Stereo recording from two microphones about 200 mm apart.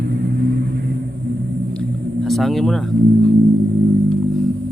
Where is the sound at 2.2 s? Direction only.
Centre (ahead or behind).